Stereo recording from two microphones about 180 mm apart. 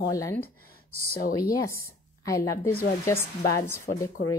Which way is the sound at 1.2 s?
55° left (ahead or behind).